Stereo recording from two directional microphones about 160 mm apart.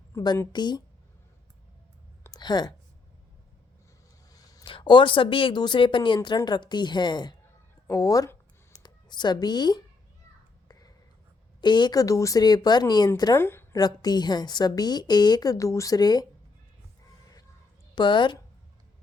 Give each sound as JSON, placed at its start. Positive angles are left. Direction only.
{"t": 0.1, "sound": "speech", "side_deg": 20}
{"t": 2.2, "sound": "a sound", "side_deg": 25}
{"t": 4.3, "sound": "speech", "side_deg": 25}
{"t": 7.9, "sound": "a sound", "side_deg": 20}
{"t": 11.6, "sound": "a woman's voice", "side_deg": 30}
{"t": 13.8, "sound": "speech", "side_deg": 25}
{"t": 17.9, "sound": "a woman's voice", "side_deg": 30}